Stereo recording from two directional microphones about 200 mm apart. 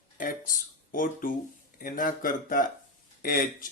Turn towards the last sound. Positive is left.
turn(degrees=45)  # may be behind; listen again after turning